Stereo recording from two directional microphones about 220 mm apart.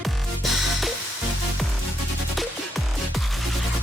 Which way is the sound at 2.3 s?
Centre (ahead or behind).